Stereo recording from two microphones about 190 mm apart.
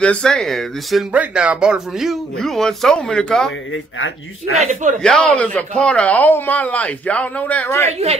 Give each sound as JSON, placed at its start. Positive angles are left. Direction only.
{"t": 0.0, "sound": "speech", "side_deg": 5}
{"t": 3.7, "sound": "speech", "side_deg": 90}
{"t": 4.6, "sound": "speech", "side_deg": -35}
{"t": 5.0, "sound": "speech", "side_deg": 5}